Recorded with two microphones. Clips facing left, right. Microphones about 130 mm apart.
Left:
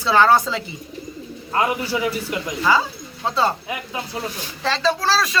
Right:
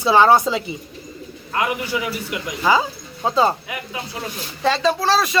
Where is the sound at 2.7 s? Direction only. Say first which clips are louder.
Right 2 dB; 15° right (ahead or behind).